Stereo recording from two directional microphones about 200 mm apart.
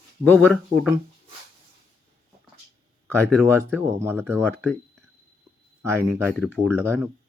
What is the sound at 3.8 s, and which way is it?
Speech, 10° right (ahead or behind).